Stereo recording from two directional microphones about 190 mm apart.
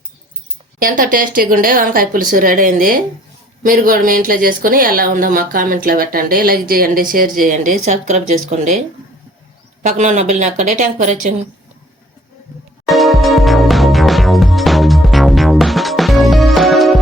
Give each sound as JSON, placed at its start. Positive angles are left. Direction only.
{"t": 0.8, "sound": "a woman's voice", "side_deg": -50}
{"t": 9.8, "sound": "a woman's voice", "side_deg": -40}
{"t": 12.9, "sound": "music", "side_deg": 0}